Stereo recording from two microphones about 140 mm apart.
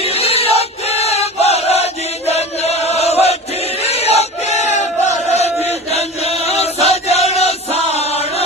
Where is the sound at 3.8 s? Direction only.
50° left (ahead or behind).